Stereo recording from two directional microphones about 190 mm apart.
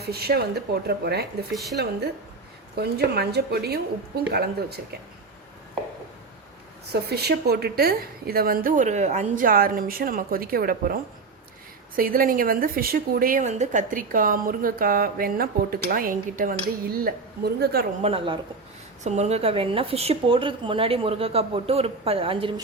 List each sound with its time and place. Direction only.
0.0 s speech: 55° right (ahead or behind)
6.9 s a woman's voice: 55° right (ahead or behind)
18.0 s a woman's voice: 30° right (ahead or behind)